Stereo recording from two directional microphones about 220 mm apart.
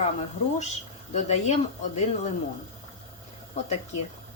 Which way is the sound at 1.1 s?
30° left (ahead or behind).